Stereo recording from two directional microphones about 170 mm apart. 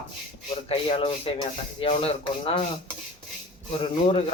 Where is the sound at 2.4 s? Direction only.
35° left (ahead or behind).